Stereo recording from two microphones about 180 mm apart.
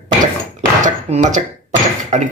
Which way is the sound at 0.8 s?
45° right (ahead or behind).